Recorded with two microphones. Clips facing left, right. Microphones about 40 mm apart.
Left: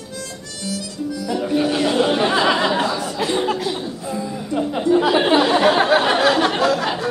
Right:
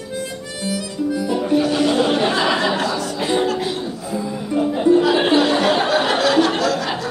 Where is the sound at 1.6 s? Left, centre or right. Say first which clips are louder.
Left 2 dB; centre.